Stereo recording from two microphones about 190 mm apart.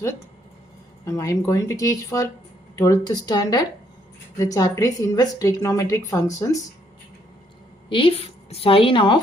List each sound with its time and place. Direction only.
1.0 s a woman's voice: 15° left (ahead or behind)
7.9 s a woman's voice: 30° left (ahead or behind)